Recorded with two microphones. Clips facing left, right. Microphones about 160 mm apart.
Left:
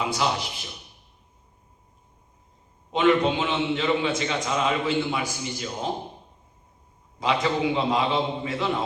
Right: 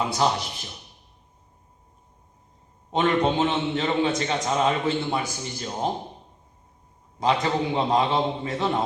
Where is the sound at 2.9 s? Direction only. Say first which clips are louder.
Left 1 dB; 40° right (ahead or behind).